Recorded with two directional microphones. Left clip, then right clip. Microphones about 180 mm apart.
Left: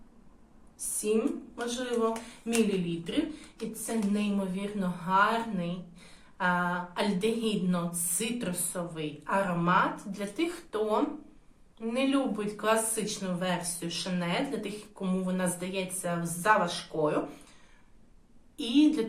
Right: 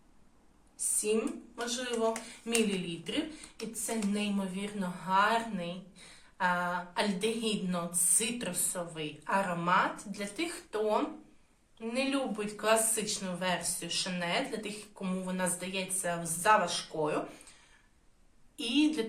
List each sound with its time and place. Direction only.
1.5 s speech: 10° right (ahead or behind)
3.8 s speech: 10° right (ahead or behind)
18.5 s speech: 5° right (ahead or behind)